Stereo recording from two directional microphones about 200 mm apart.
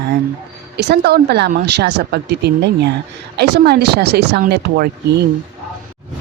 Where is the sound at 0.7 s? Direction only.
55° right (ahead or behind).